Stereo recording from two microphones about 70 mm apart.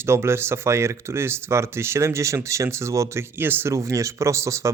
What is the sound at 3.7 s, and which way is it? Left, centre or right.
Speech, right.